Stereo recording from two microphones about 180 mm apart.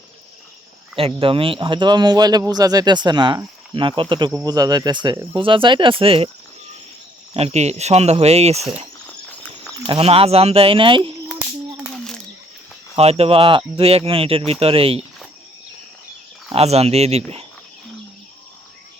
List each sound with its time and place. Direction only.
0.9 s speech: 30° right (ahead or behind)
7.3 s speech: 35° right (ahead or behind)
9.8 s speech: 30° right (ahead or behind)
11.3 s a sound: centre (ahead or behind)
13.0 s speech: 35° right (ahead or behind)
16.5 s speech: 35° right (ahead or behind)